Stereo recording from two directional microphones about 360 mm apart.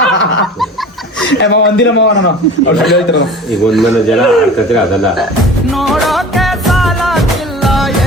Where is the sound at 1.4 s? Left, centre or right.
Left.